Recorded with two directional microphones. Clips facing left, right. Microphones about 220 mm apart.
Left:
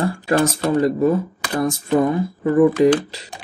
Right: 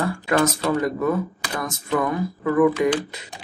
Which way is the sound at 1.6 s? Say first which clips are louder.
Left 7 dB; 30° left (ahead or behind).